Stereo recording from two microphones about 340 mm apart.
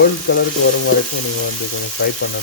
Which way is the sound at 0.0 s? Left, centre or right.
Left.